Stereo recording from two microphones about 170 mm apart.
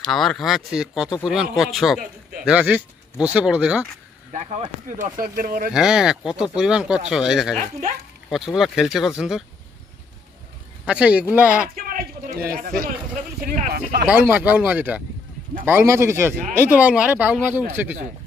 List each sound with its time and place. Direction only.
0.0 s speech: centre (ahead or behind)
4.3 s speech: 40° right (ahead or behind)
5.7 s speech: 5° right (ahead or behind)
10.9 s speech: 5° right (ahead or behind)
11.7 s a sound: 60° right (ahead or behind)
12.4 s speech: 60° right (ahead or behind)
14.0 s speech: 10° right (ahead or behind)